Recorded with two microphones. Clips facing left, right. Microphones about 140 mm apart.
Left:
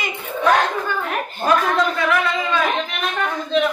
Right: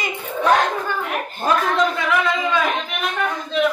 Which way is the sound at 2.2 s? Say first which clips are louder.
Even; 10° right (ahead or behind).